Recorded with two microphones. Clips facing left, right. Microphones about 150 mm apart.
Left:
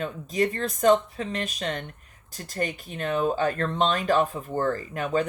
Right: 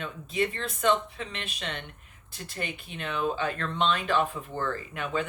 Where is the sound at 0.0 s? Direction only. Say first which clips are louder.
Left 4 dB; 40° left (ahead or behind).